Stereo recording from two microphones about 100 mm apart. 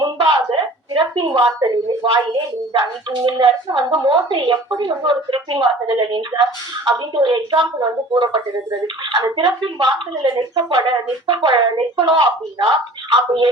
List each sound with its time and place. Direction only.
0.0 s a sound: 55° right (ahead or behind)
3.2 s speech: 50° right (ahead or behind)
9.4 s speech: 50° right (ahead or behind)